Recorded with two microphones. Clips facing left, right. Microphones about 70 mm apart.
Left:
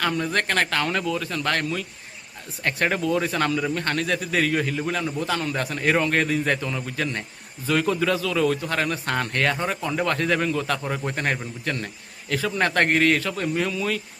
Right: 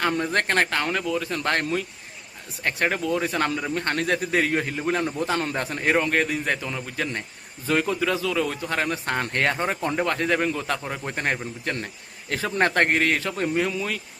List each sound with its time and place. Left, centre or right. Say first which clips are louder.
0.0 s a man's voice: right 1 dB; right
0.9 s a man's voice: even; centre
1.3 s a man's voice: right 1 dB; right
2.6 s a man's voice: left 1 dB; centre
3.2 s a man's voice: left 1 dB; centre
5.9 s a man's voice: left 1 dB; centre; by 10.0 s right
10.0 s a man's voice: left 1 dB; centre
11.1 s a man's voice: even; centre
12.9 s a man's voice: left 2 dB; centre
13.1 s a man's voice: even; right
13.6 s a man's voice: even; centre